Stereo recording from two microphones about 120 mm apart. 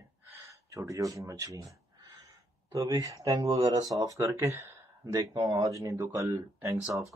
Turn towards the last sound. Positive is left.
turn(degrees=-25)  # may be behind; listen again after turning